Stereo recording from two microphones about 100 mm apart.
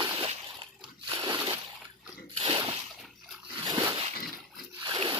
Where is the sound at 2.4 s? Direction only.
50° right (ahead or behind).